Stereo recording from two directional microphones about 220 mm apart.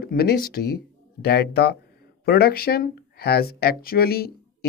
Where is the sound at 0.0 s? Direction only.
45° left (ahead or behind).